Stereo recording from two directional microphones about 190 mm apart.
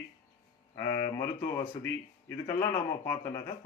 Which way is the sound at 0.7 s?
15° left (ahead or behind).